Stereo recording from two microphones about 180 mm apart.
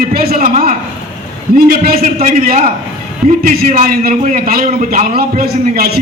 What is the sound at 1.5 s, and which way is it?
A man's voice, 55° right (ahead or behind).